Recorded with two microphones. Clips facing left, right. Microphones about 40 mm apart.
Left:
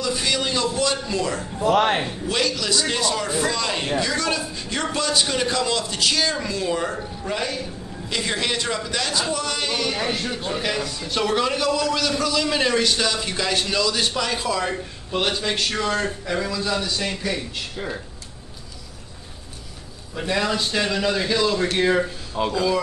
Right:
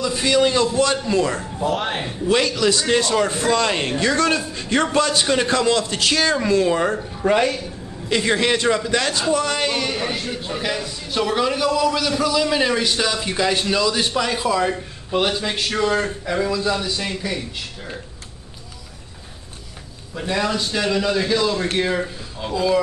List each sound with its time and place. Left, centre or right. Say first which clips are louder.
0.0 s a man's voice: right 6 dB; centre
1.1 s a man's voice: right 4 dB; right
1.7 s a man's voice: left 6 dB; left
2.2 s a man's voice: right 9 dB; right
3.0 s a man's voice: right 3 dB; right
8.1 s a man's voice: right 6 dB; centre
9.9 s a man's voice: even; centre
20.2 s a man's voice: right 1 dB; centre